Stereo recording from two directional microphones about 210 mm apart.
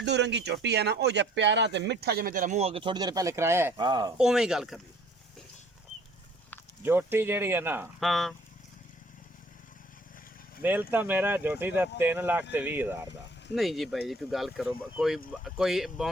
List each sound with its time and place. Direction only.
0.0 s speech: 55° right (ahead or behind); by 4.1 s 20° right (ahead or behind)
4.2 s speech: centre (ahead or behind)
6.8 s speech: 10° right (ahead or behind)
7.9 s speech: centre (ahead or behind)
10.6 s speech: 10° right (ahead or behind)